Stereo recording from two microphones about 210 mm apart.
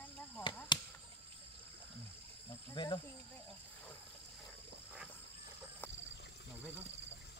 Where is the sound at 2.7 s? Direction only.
25° left (ahead or behind).